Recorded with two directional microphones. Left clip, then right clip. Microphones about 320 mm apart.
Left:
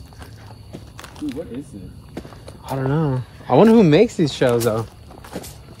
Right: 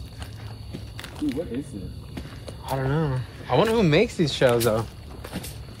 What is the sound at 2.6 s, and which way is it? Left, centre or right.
Speech, centre.